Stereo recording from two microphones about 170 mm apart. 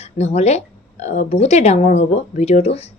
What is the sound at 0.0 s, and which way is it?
Speech, 40° left (ahead or behind).